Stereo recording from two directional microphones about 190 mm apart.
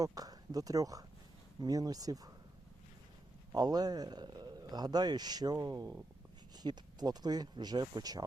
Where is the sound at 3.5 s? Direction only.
20° right (ahead or behind).